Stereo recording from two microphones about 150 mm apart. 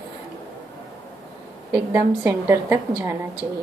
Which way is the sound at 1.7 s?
15° right (ahead or behind).